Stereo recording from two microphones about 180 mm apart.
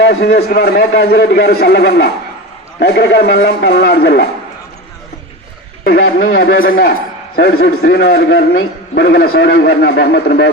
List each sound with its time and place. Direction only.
0.0 s a man's voice: 70° left (ahead or behind)
5.8 s a man's voice: 55° left (ahead or behind)